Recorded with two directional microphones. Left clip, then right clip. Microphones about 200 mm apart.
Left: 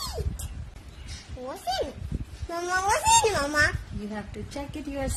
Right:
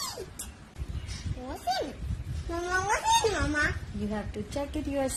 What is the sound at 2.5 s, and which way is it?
Speech, 45° left (ahead or behind).